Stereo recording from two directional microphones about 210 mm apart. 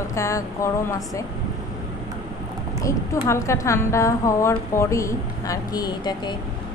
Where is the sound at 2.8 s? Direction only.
15° left (ahead or behind).